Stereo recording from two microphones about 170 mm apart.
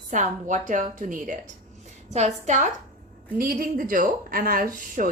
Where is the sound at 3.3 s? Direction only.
55° right (ahead or behind).